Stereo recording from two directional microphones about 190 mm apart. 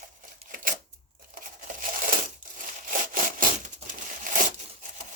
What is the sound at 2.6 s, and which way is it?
Sawing, 45° right (ahead or behind).